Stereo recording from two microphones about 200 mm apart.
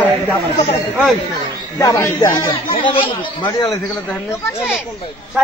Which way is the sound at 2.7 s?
25° left (ahead or behind).